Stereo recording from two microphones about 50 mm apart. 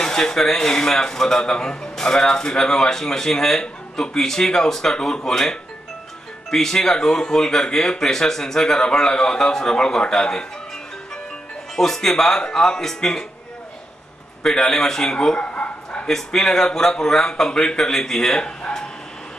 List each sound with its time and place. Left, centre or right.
0.0 s a man's voice: centre
11.7 s a man's voice: centre
14.4 s a man's voice: centre
16.1 s a man's voice: centre